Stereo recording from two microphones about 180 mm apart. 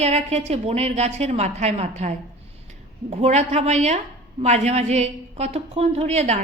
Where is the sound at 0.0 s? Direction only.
35° right (ahead or behind).